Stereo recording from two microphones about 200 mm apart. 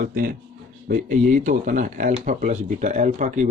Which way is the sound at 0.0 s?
45° right (ahead or behind).